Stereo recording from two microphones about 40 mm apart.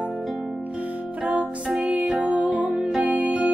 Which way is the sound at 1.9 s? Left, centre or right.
Right.